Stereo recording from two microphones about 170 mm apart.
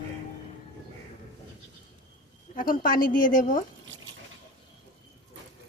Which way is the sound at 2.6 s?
55° left (ahead or behind).